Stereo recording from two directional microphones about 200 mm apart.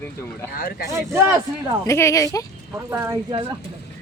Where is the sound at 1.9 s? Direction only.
15° left (ahead or behind).